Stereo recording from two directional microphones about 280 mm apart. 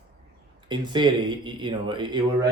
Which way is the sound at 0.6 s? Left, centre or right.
Centre.